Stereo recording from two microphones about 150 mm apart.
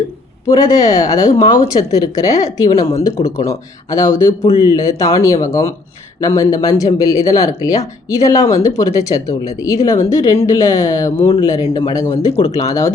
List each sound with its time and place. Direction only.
0.4 s speech: 25° left (ahead or behind)